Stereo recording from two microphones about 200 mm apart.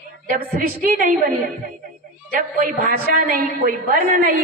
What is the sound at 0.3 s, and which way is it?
Speech, 40° right (ahead or behind).